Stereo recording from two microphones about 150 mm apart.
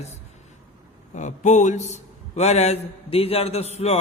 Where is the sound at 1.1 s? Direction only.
55° left (ahead or behind).